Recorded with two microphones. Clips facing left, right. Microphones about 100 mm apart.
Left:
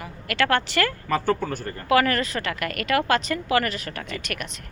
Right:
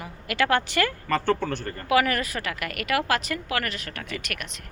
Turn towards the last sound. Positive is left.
turn(degrees=0)  # may be behind; listen again after turning